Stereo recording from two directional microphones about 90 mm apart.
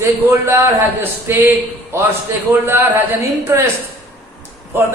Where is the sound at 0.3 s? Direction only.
25° right (ahead or behind).